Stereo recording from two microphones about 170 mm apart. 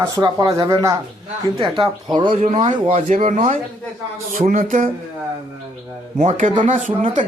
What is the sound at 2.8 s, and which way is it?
A woman's voice, 45° right (ahead or behind).